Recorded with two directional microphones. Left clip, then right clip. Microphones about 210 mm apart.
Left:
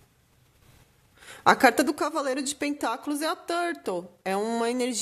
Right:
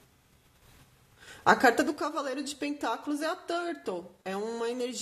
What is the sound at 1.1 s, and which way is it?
A woman's voice, 35° left (ahead or behind).